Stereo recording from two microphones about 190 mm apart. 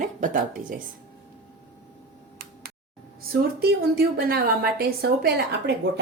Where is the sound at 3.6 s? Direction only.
55° right (ahead or behind).